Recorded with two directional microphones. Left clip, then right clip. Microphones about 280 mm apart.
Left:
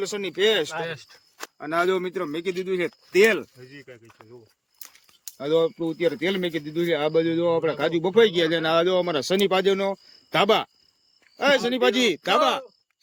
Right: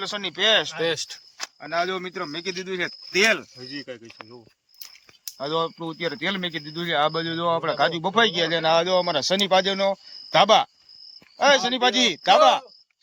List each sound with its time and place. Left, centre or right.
0.0 s speech: centre
3.6 s speech: right
5.2 s speech: centre